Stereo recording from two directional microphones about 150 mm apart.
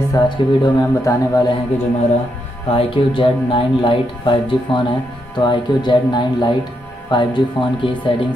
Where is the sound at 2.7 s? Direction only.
35° left (ahead or behind).